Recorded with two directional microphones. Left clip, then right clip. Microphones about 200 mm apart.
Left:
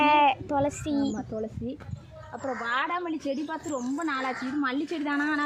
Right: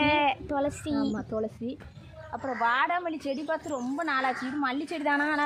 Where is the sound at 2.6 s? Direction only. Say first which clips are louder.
Right 4 dB; 25° right (ahead or behind).